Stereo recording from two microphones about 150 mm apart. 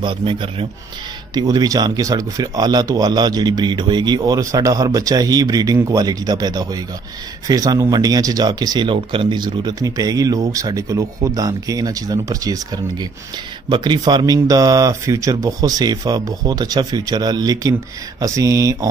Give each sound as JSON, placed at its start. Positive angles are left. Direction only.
{"t": 0.0, "sound": "a man's voice", "side_deg": -35}